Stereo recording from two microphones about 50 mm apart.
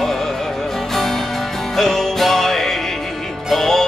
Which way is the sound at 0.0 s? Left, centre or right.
Centre.